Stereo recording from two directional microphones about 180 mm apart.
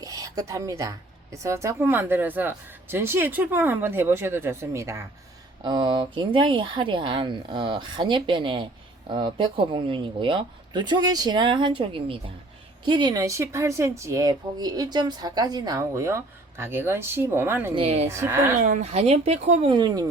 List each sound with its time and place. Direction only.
0.0 s a woman's voice: 20° right (ahead or behind)
17.7 s speech: 35° right (ahead or behind)
18.2 s a woman's voice: 15° right (ahead or behind)
18.8 s speech: 35° right (ahead or behind)
19.7 s speech: 20° right (ahead or behind)